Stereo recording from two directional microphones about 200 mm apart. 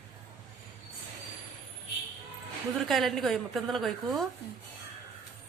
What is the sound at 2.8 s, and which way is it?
A woman's voice, centre (ahead or behind).